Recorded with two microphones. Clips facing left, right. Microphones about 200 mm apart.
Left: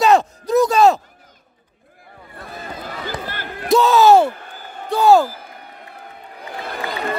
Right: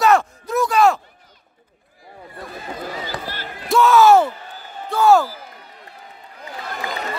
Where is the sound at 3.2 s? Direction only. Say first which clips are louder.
Left 3 dB; 50° left (ahead or behind).